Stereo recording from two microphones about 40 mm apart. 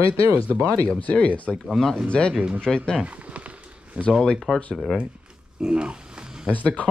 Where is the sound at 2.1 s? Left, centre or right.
Left.